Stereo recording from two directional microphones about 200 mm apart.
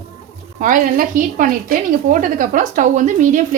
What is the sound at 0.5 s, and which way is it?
Speech, 40° right (ahead or behind).